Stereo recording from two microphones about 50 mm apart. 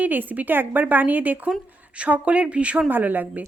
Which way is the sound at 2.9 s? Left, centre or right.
Right.